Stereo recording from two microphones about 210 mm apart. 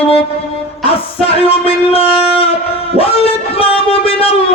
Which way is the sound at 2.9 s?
25° left (ahead or behind).